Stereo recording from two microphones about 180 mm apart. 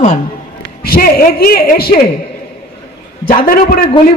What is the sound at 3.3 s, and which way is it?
Speech, 50° left (ahead or behind).